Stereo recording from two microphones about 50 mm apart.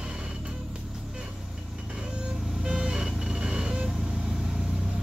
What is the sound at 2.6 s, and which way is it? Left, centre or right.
Vehicle, centre.